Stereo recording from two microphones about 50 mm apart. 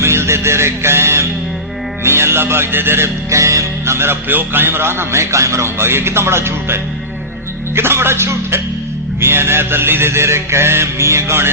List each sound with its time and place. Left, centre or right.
0.0 s music: right
2.0 s a man's voice: right
3.2 s music: right
3.9 s a man's voice: right
7.8 s a man's voice: right